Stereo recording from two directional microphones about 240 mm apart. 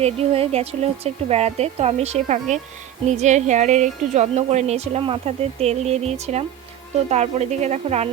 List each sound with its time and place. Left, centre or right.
0.0 s a woman's voice: right